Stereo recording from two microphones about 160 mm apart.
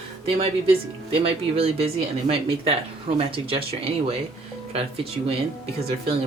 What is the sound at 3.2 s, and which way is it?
Speech, 35° right (ahead or behind).